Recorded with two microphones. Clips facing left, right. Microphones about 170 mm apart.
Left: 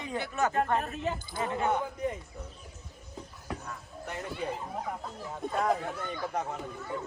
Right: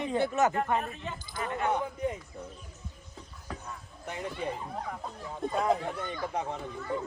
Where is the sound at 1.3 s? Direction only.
25° left (ahead or behind).